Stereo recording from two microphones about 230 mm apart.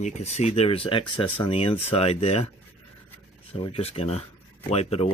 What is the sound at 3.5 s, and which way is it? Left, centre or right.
Speech, left.